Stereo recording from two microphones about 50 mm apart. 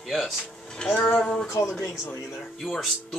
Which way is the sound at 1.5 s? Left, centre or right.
Left.